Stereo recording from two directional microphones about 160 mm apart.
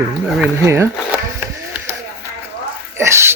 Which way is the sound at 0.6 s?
15° right (ahead or behind).